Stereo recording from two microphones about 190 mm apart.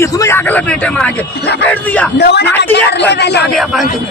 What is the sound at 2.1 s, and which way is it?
A woman's voice, 65° left (ahead or behind).